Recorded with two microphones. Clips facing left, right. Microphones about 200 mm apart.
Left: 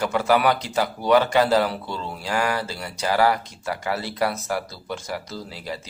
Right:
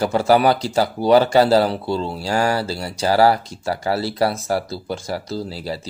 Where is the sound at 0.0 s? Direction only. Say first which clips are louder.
Right 4 dB; 30° right (ahead or behind).